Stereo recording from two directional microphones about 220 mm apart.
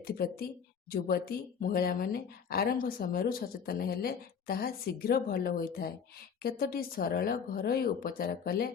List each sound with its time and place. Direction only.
0.0 s speech: 45° left (ahead or behind)